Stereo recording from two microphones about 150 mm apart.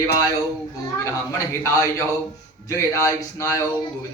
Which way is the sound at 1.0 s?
20° left (ahead or behind).